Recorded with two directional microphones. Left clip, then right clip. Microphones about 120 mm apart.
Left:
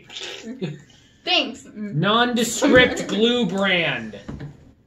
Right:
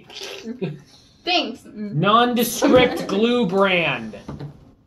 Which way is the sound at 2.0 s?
5° right (ahead or behind).